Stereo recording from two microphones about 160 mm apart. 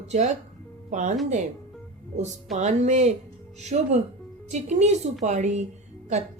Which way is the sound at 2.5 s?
45° right (ahead or behind).